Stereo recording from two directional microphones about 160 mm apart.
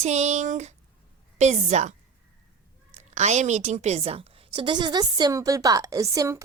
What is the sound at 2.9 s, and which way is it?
A woman's voice, 45° right (ahead or behind).